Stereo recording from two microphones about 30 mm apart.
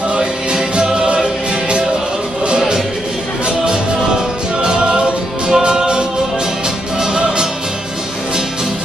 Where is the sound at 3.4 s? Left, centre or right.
Right.